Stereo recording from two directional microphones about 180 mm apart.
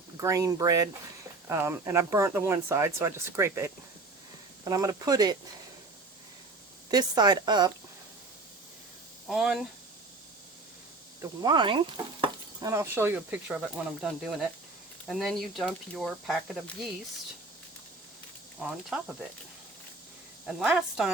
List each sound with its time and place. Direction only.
0.2 s speech: 20° right (ahead or behind)
6.9 s speech: 20° right (ahead or behind)
9.2 s speech: centre (ahead or behind)
11.2 s speech: 25° right (ahead or behind)
12.6 s speech: 15° right (ahead or behind)
18.6 s speech: 5° right (ahead or behind)
20.5 s speech: 5° right (ahead or behind)